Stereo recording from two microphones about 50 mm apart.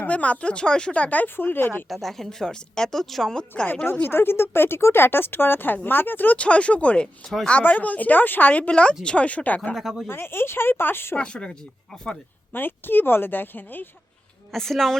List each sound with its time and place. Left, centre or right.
0.1 s speech: left
1.9 s a woman's voice: centre
3.5 s speech: left
4.0 s speech: left
6.3 s speech: left
9.7 s speech: centre
10.1 s speech: left
11.2 s speech: centre
12.5 s speech: left
14.5 s a woman's voice: centre